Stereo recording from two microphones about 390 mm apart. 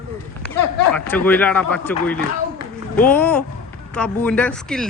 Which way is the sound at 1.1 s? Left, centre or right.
Centre.